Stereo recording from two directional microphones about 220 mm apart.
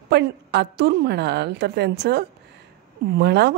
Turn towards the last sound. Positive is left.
turn(degrees=-50)  # may be behind; listen again after turning